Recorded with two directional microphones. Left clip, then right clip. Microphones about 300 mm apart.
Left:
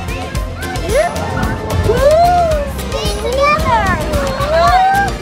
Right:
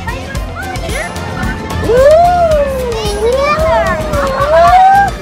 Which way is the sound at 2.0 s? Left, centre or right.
Centre.